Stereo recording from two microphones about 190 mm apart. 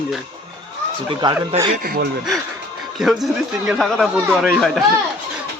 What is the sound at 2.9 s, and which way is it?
Speech, centre (ahead or behind).